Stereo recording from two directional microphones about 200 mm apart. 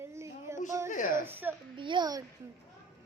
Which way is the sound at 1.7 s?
25° right (ahead or behind).